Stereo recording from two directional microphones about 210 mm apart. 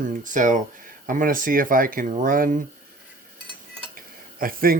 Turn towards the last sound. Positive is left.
turn(degrees=-45)  # may be behind; listen again after turning